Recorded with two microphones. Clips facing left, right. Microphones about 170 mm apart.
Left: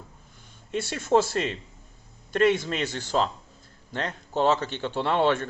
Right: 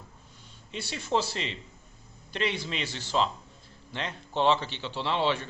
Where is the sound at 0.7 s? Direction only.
50° left (ahead or behind).